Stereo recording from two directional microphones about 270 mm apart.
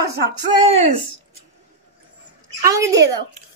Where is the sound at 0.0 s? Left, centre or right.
Right.